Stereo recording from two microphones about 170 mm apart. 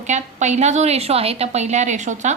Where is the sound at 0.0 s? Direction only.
45° right (ahead or behind).